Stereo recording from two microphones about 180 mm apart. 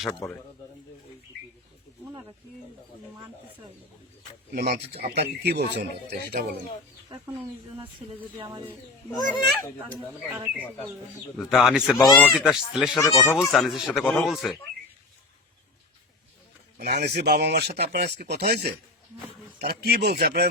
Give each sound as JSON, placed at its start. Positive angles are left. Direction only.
{"t": 0.2, "sound": "a man's voice", "side_deg": 5}
{"t": 4.5, "sound": "speech", "side_deg": -60}
{"t": 8.4, "sound": "speech", "side_deg": -25}
{"t": 9.1, "sound": "speech", "side_deg": 20}
{"t": 10.2, "sound": "a man's voice", "side_deg": -10}
{"t": 13.0, "sound": "speech", "side_deg": 15}
{"t": 13.5, "sound": "a man's voice", "side_deg": 0}
{"t": 16.7, "sound": "speech", "side_deg": -65}